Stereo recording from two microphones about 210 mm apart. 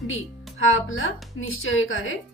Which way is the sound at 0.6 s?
70° left (ahead or behind).